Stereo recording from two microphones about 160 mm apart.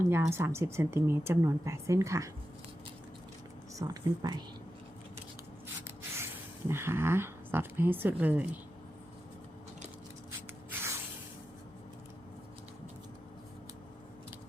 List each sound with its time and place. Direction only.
0.1 s speech: 15° right (ahead or behind)
3.8 s speech: 25° right (ahead or behind)
6.7 s speech: 15° right (ahead or behind)
10.7 s spray: 15° right (ahead or behind)